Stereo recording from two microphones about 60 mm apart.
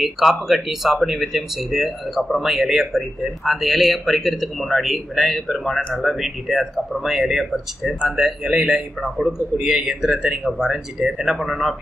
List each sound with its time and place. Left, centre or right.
0.0 s a man's voice: centre